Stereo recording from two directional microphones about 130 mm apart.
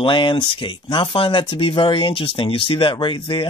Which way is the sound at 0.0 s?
40° left (ahead or behind).